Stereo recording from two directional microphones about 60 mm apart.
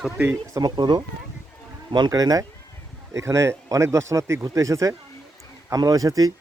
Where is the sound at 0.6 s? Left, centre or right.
Right.